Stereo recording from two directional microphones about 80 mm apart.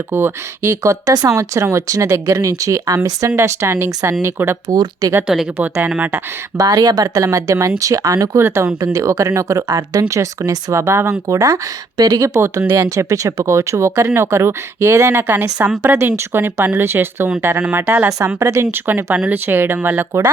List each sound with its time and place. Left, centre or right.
0.1 s speech: right
1.3 s speech: right
4.7 s speech: right
5.3 s speech: centre
6.6 s speech: right
18.3 s speech: right
18.7 s speech: right